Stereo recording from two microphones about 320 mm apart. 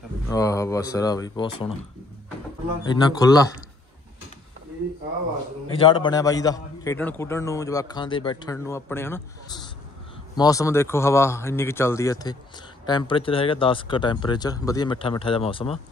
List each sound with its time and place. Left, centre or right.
0.3 s a man's voice: centre
2.8 s a man's voice: centre
5.7 s a man's voice: centre